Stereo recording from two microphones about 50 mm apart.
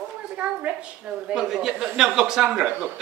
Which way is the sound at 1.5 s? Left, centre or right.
Centre.